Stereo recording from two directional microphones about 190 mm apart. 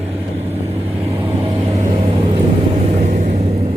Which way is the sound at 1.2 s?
30° right (ahead or behind).